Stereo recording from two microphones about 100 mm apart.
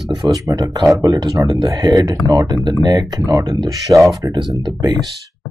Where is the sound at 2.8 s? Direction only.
45° right (ahead or behind).